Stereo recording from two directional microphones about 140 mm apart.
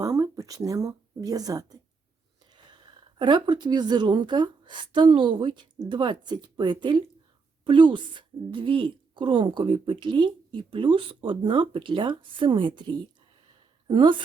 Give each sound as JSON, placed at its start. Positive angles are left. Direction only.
{"t": 0.0, "sound": "speech", "side_deg": -25}
{"t": 3.2, "sound": "a woman's voice", "side_deg": -35}